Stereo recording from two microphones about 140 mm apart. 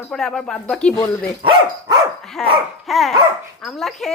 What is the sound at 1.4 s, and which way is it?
Speech, 35° right (ahead or behind).